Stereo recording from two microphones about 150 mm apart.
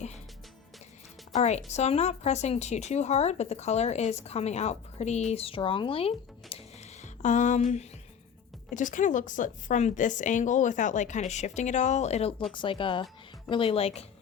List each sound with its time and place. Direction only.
1.3 s speech: 50° left (ahead or behind)
7.0 s a sound: 55° left (ahead or behind)
8.7 s a woman's voice: 60° left (ahead or behind)
12.5 s speech: 35° left (ahead or behind)